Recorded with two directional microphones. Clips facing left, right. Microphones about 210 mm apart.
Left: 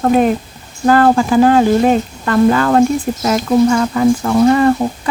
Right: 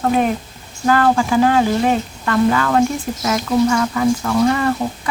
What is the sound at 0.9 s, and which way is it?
Speech, 40° left (ahead or behind).